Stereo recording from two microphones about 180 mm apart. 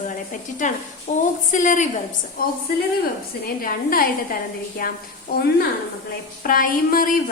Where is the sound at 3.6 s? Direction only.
50° left (ahead or behind).